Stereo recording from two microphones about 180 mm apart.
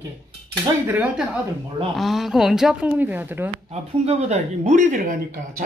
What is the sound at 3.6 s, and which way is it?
Speech, 35° right (ahead or behind).